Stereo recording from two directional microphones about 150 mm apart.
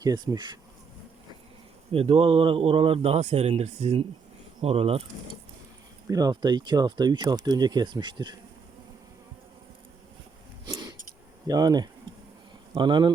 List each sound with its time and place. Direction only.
0.0 s speech: 25° right (ahead or behind)
1.9 s speech: 40° right (ahead or behind)
6.1 s speech: 25° right (ahead or behind)
10.7 s a sound: 25° right (ahead or behind)
11.4 s speech: 25° right (ahead or behind)